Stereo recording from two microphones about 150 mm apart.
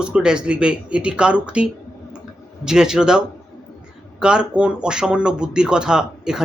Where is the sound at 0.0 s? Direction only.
5° right (ahead or behind).